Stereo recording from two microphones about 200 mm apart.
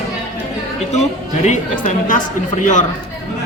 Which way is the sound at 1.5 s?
40° left (ahead or behind).